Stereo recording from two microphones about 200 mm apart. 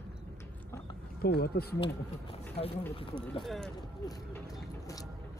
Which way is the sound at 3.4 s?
Centre (ahead or behind).